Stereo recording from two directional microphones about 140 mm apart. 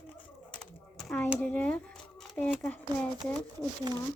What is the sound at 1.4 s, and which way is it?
Speech, 10° left (ahead or behind).